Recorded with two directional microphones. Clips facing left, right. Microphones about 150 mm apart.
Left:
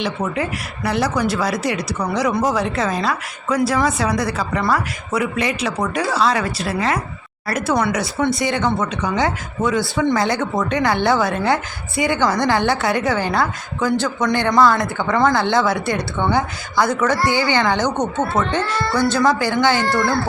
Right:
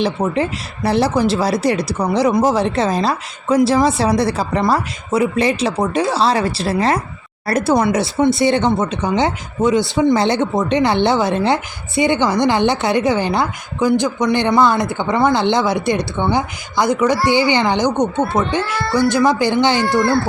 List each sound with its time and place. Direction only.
0.0 s a woman's voice: 30° right (ahead or behind)